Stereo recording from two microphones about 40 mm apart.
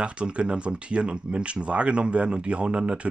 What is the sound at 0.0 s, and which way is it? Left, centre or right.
Speech, right.